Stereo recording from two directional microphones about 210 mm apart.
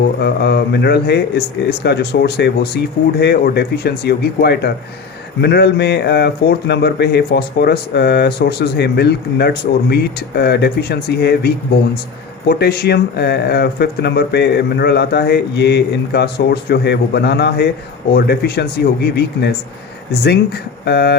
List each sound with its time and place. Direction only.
0.2 s speech: 50° left (ahead or behind)
20.8 s speech: 50° left (ahead or behind)